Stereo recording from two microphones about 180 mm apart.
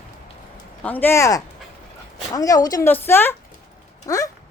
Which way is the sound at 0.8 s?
10° left (ahead or behind).